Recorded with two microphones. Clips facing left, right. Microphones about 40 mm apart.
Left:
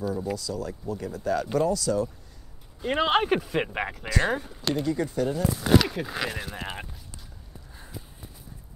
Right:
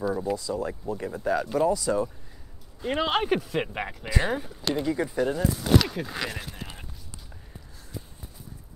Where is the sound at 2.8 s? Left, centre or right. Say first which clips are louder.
Left 2 dB; centre.